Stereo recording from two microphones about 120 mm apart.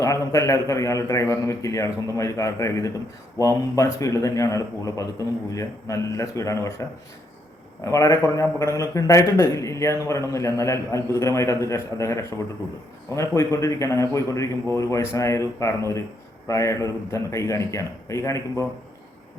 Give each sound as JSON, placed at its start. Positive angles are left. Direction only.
{"t": 0.0, "sound": "a man's voice", "side_deg": 30}
{"t": 7.9, "sound": "a man's voice", "side_deg": 25}